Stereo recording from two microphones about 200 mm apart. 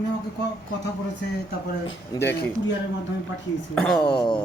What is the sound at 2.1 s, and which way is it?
Speech, 10° left (ahead or behind).